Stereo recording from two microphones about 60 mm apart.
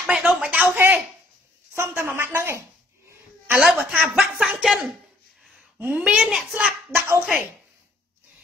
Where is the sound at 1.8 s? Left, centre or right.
Right.